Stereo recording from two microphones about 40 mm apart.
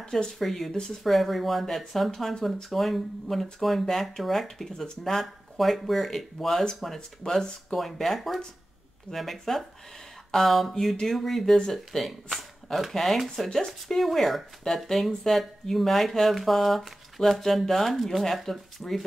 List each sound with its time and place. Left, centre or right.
0.0 s speech: centre
0.4 s speech: centre
0.7 s speech: centre
1.0 s speech: centre
5.2 s speech: centre
11.7 s speech: centre